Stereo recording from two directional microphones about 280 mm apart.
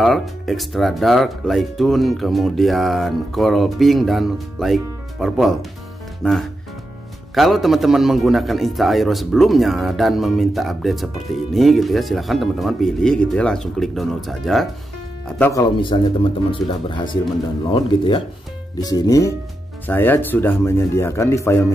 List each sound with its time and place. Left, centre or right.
0.0 s a man's voice: centre
15.9 s speech: centre